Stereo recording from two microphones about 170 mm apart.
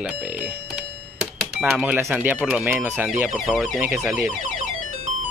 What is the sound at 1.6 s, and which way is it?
Speech, 10° right (ahead or behind).